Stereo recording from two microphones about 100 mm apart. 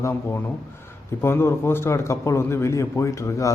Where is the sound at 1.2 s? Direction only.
25° left (ahead or behind).